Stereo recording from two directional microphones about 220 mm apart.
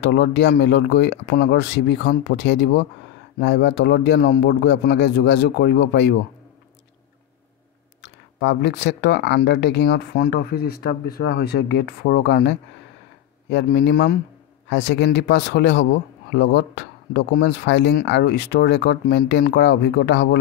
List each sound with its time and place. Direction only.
0.0 s a man's voice: 50° left (ahead or behind)
8.0 s a man's voice: 55° left (ahead or behind)